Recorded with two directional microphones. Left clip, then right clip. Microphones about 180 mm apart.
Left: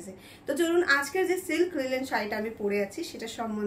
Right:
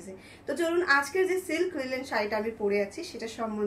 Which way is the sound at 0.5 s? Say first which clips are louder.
Left 1 dB; 30° left (ahead or behind).